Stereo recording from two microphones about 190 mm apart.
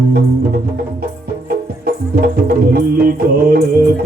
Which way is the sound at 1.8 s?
55° right (ahead or behind).